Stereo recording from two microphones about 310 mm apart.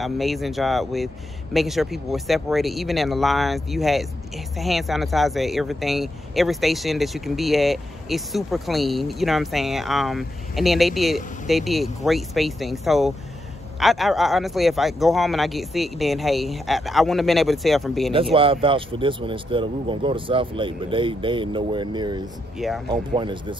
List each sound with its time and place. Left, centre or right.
0.0 s speech: centre
18.3 s speech: centre